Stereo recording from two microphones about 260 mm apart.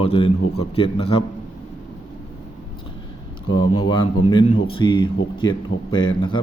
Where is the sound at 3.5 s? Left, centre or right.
Left.